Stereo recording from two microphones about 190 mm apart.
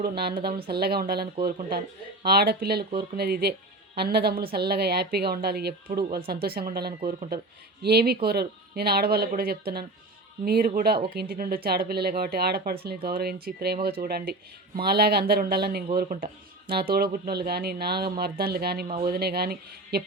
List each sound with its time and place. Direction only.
0.0 s speech: 55° right (ahead or behind)